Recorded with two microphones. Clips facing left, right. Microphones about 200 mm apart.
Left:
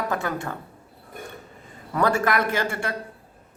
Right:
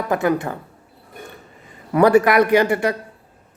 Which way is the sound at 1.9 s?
15° right (ahead or behind).